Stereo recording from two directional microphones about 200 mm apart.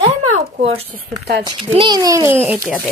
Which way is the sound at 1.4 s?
25° right (ahead or behind).